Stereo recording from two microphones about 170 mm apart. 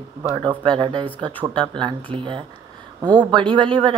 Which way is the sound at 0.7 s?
30° right (ahead or behind).